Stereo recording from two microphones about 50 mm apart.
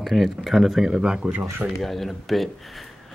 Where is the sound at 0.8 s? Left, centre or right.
Centre.